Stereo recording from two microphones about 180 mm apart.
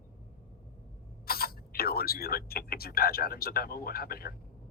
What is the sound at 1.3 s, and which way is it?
A man's voice, 55° left (ahead or behind).